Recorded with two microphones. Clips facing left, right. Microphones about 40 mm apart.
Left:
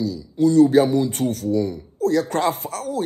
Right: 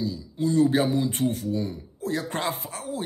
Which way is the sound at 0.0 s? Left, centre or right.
Right.